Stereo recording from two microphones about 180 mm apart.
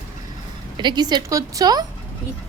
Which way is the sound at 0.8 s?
25° right (ahead or behind).